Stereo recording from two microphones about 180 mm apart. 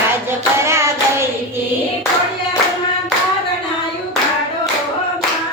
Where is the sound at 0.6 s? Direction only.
15° right (ahead or behind).